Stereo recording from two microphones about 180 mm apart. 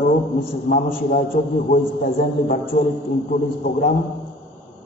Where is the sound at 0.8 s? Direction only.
50° left (ahead or behind).